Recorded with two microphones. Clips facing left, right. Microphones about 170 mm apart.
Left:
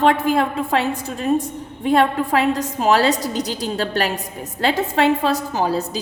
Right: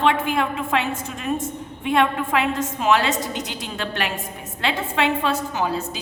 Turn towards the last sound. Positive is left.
turn(degrees=35)  # may be behind; listen again after turning